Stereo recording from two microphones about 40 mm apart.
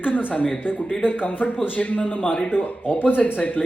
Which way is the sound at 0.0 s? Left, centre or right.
Left.